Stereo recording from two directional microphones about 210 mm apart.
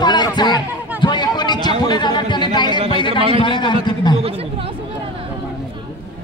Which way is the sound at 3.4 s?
20° left (ahead or behind).